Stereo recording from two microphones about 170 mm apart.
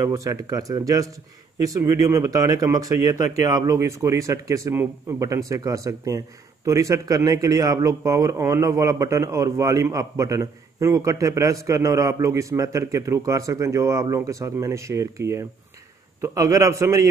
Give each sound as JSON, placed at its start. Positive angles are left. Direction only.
{"t": 0.0, "sound": "a man's voice", "side_deg": -20}